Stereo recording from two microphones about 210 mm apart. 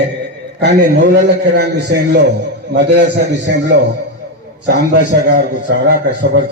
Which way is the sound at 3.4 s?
55° right (ahead or behind).